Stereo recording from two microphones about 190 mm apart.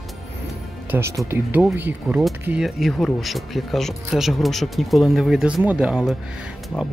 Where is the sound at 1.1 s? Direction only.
10° right (ahead or behind).